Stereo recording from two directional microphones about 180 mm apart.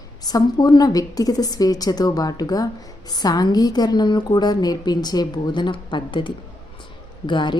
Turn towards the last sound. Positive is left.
turn(degrees=25)  # may be behind; listen again after turning